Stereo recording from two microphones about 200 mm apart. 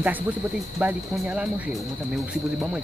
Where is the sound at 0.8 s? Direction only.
5° right (ahead or behind).